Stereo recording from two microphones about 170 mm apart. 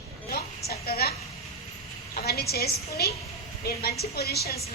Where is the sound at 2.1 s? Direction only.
65° left (ahead or behind).